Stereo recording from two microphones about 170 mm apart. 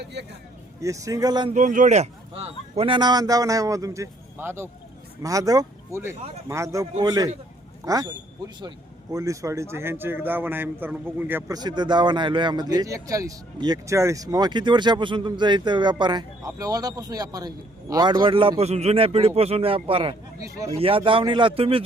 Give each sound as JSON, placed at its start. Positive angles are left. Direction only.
{"t": 0.0, "sound": "speech", "side_deg": -85}
{"t": 0.8, "sound": "speech", "side_deg": -20}
{"t": 1.5, "sound": "a man's voice", "side_deg": -45}
{"t": 9.1, "sound": "a man's voice", "side_deg": -20}
{"t": 11.5, "sound": "a man's voice", "side_deg": -25}
{"t": 20.4, "sound": "speech", "side_deg": -20}
{"t": 20.7, "sound": "a man's voice", "side_deg": -35}